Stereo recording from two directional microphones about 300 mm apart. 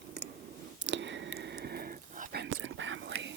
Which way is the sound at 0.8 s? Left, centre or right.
Right.